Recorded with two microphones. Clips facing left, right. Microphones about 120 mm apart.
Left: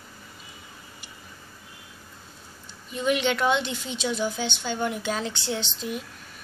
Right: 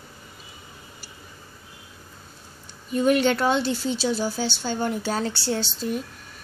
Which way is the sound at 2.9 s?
45° right (ahead or behind).